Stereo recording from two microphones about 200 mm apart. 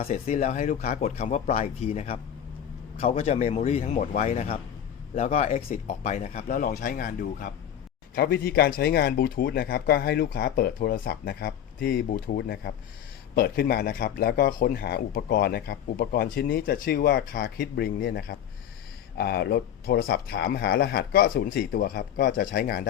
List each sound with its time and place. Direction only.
0.0 s speech: 35° left (ahead or behind)